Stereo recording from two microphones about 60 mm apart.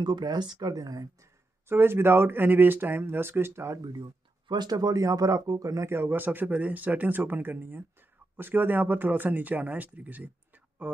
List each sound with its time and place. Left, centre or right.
0.2 s speech: right
1.2 s speech: right
4.6 s speech: right
5.9 s speech: right